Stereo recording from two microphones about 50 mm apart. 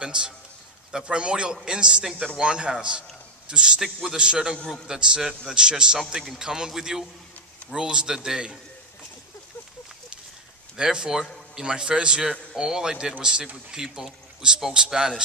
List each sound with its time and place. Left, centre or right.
0.0 s a man's voice: centre
3.8 s a man's voice: centre
7.7 s a man's voice: centre
10.8 s a man's voice: centre